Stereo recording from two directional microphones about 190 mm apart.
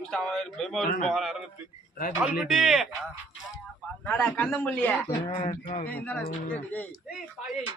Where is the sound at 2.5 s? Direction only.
Centre (ahead or behind).